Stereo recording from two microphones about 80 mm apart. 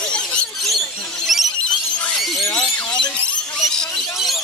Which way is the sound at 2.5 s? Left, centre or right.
Left.